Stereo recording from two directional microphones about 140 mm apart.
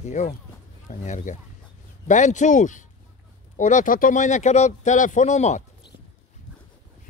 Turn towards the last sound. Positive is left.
turn(degrees=55)  # may be behind; listen again after turning